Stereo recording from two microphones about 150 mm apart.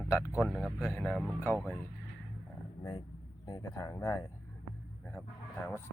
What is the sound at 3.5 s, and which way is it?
Speech, 20° left (ahead or behind).